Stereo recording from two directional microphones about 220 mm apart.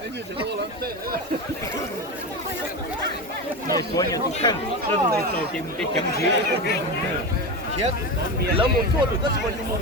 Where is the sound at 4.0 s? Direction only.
15° left (ahead or behind).